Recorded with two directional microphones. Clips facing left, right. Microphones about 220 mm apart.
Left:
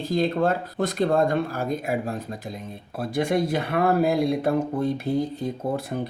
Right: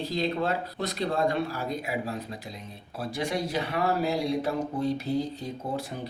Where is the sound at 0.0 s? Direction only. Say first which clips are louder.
Left 6 dB; 50° left (ahead or behind).